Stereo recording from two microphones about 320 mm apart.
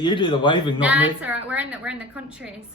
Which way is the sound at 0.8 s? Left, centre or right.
Centre.